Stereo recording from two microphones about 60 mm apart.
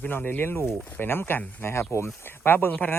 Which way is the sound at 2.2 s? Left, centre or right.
Left.